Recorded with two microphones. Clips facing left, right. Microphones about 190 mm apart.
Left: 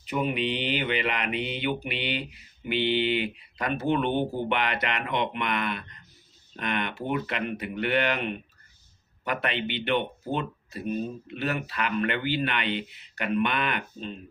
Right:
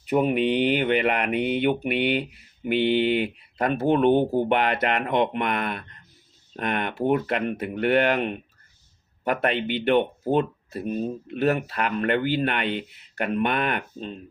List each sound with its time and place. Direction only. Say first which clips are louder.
0.1 s speech: right 7 dB; 50° right (ahead or behind)